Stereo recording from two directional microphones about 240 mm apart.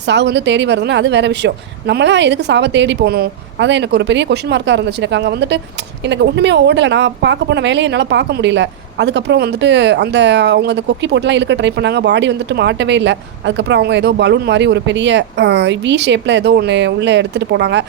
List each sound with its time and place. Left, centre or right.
0.1 s speech: right